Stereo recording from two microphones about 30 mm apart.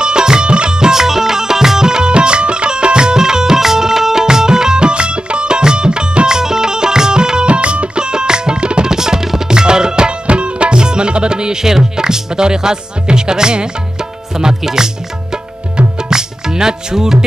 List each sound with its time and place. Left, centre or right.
0.0 s music: right
0.7 s music: centre
2.1 s music: right
8.9 s tabla: centre
9.5 s tabla: right
10.2 s music: right
11.7 s speech: right
16.1 s music: right